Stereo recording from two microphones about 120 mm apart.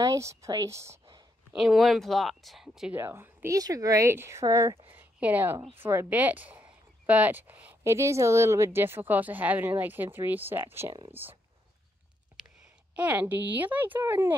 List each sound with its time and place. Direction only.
0.0 s speech: 25° right (ahead or behind)
1.5 s speech: 5° right (ahead or behind)
2.9 s speech: 20° right (ahead or behind)
4.9 s a sound: 15° right (ahead or behind)
5.8 s speech: 20° right (ahead or behind)
12.9 s speech: 15° right (ahead or behind)